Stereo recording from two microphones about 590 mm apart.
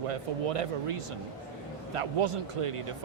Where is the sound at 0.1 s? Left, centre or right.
Right.